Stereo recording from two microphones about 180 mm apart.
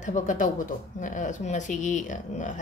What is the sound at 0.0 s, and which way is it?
Speech, 45° left (ahead or behind).